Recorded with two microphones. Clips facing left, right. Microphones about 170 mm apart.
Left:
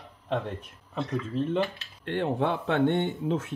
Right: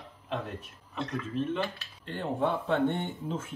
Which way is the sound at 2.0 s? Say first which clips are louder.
Left 3 dB; 70° left (ahead or behind).